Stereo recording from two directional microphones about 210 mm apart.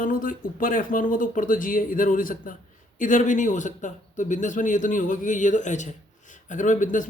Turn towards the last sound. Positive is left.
turn(degrees=35)  # may be behind; listen again after turning